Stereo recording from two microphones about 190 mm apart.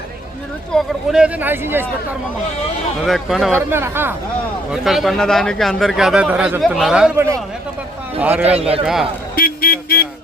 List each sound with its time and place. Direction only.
0.7 s speech: 5° right (ahead or behind)
3.0 s speech: centre (ahead or behind)
3.5 s speech: 10° right (ahead or behind)
4.7 s speech: centre (ahead or behind)
8.2 s speech: 10° right (ahead or behind)
9.3 s vehicle: 50° left (ahead or behind)